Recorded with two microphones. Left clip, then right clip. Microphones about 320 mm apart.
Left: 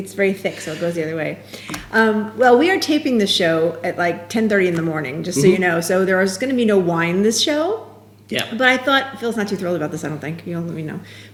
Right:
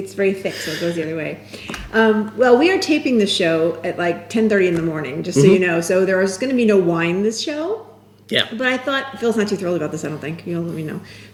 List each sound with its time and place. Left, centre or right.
0.2 s speech: centre